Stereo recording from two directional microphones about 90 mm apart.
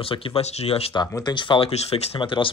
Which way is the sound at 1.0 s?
50° left (ahead or behind).